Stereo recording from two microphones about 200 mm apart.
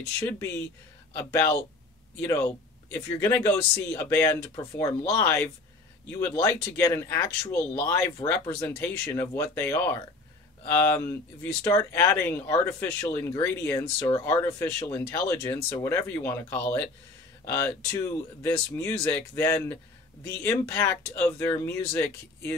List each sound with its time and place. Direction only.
0.3 s speech: 15° left (ahead or behind)